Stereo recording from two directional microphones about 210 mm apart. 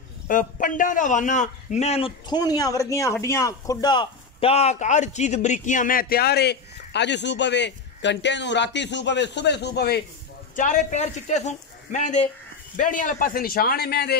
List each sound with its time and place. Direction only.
0.3 s a man's voice: 40° left (ahead or behind)
10.5 s a man's voice: 35° left (ahead or behind)